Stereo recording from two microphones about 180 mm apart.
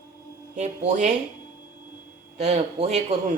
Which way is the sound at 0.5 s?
40° right (ahead or behind).